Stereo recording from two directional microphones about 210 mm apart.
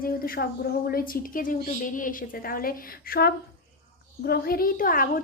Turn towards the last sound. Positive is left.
turn(degrees=40)  # may be behind; listen again after turning